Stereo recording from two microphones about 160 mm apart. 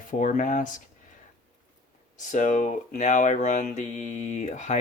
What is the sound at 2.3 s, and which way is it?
Speech, 50° left (ahead or behind).